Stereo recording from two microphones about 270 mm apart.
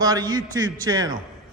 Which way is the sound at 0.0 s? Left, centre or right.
Centre.